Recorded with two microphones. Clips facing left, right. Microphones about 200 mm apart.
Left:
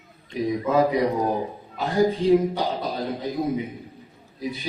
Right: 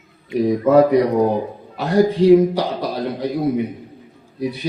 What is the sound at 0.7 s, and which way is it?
Speech, 65° right (ahead or behind).